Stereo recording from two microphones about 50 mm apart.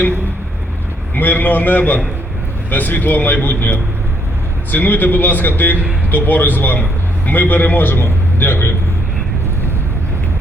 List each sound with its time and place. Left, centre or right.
1.1 s a man's voice: left